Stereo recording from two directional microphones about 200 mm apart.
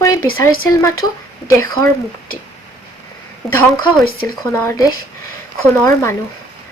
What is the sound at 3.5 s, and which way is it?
Speech, 10° left (ahead or behind).